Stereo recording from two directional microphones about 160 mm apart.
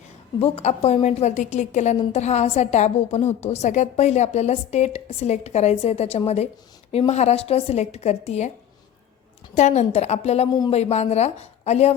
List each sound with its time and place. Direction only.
0.3 s a woman's voice: 35° left (ahead or behind)
9.6 s a woman's voice: 45° left (ahead or behind)